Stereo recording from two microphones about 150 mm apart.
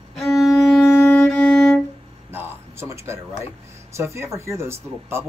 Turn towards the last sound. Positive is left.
turn(degrees=-15)  # may be behind; listen again after turning